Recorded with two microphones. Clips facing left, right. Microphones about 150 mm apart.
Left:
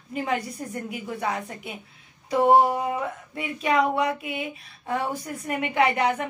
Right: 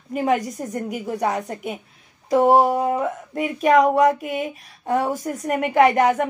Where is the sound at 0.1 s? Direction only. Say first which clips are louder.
Right 7 dB; 45° right (ahead or behind).